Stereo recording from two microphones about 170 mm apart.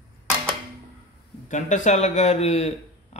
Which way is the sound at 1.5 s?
45° left (ahead or behind).